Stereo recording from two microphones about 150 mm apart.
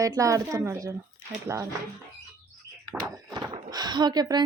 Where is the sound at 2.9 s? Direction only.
5° right (ahead or behind).